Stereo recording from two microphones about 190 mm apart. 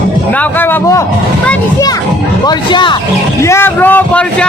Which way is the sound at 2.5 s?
25° left (ahead or behind).